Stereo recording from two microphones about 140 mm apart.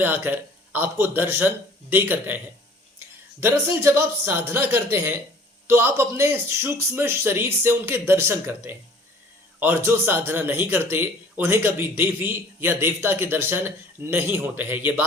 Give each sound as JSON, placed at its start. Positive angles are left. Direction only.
{"t": 0.0, "sound": "a man's voice", "side_deg": -15}
{"t": 3.4, "sound": "a man's voice", "side_deg": -15}